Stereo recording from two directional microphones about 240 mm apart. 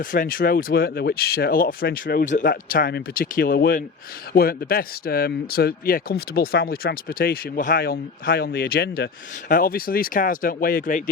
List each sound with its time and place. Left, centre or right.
0.0 s speech: left